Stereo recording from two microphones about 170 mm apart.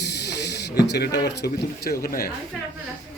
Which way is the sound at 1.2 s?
70° left (ahead or behind).